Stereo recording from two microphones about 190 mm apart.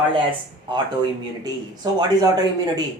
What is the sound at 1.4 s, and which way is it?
Speech, 20° right (ahead or behind).